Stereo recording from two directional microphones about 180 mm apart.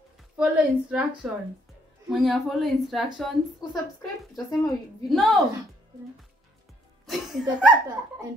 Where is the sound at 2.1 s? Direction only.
Centre (ahead or behind).